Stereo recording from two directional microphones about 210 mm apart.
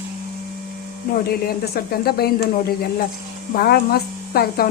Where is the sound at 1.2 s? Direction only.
45° left (ahead or behind).